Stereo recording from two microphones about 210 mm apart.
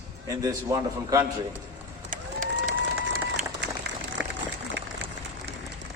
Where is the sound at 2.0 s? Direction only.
40° right (ahead or behind).